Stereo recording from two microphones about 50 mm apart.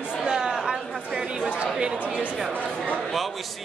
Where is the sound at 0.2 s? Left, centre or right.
Centre.